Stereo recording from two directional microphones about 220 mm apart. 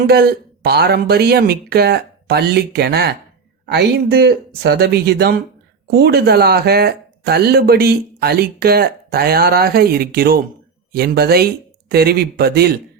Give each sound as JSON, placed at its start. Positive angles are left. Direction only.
{"t": 0.1, "sound": "speech", "side_deg": -45}